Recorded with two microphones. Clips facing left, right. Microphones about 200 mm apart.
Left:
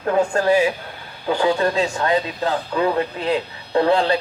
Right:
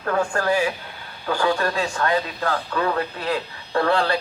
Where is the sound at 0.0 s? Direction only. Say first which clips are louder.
Left 4 dB; 20° left (ahead or behind).